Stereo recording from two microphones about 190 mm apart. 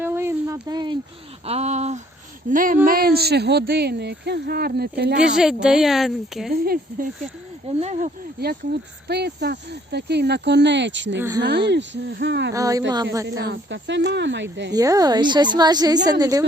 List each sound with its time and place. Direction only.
0.0 s a sound: 15° right (ahead or behind)
1.5 s speech: 35° right (ahead or behind); by 5.1 s 55° right (ahead or behind)
5.2 s speech: 5° right (ahead or behind)
6.5 s speech: 55° right (ahead or behind)
7.7 s speech: 35° right (ahead or behind)
8.4 s speech: 60° right (ahead or behind)
11.2 s speech: 15° right (ahead or behind)
11.7 s speech: 65° right (ahead or behind)
12.5 s speech: 20° right (ahead or behind)
13.4 s speech: 65° right (ahead or behind)
14.8 s a woman's voice: 20° right (ahead or behind)